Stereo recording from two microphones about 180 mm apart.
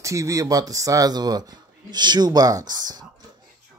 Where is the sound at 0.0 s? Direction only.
15° right (ahead or behind).